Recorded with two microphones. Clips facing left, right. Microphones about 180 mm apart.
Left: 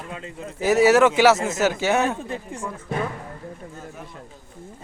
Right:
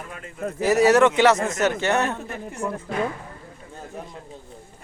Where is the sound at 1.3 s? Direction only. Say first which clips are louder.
Even; 25° left (ahead or behind).